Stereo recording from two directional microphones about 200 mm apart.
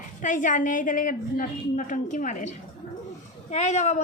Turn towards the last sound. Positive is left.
turn(degrees=35)  # may be behind; listen again after turning